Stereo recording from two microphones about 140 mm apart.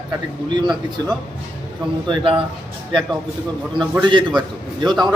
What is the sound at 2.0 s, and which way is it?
Speech, 40° right (ahead or behind).